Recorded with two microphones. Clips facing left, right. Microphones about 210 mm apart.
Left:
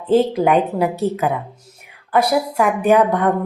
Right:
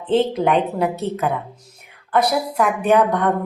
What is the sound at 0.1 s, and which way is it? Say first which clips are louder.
Speech: left 3 dB; centre (ahead or behind).